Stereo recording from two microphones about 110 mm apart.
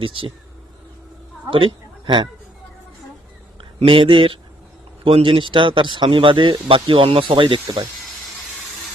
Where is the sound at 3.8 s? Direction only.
50° right (ahead or behind).